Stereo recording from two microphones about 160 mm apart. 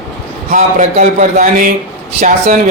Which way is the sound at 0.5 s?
50° right (ahead or behind).